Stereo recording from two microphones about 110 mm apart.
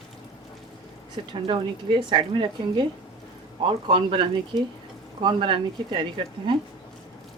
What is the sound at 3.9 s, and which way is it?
Speech, 50° right (ahead or behind).